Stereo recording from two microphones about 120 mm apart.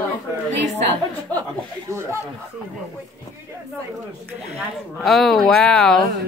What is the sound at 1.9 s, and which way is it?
Speech, 20° right (ahead or behind).